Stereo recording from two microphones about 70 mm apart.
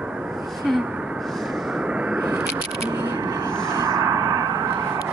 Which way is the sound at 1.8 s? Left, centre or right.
Centre.